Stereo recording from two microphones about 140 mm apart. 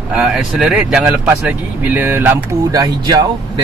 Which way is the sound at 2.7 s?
30° right (ahead or behind).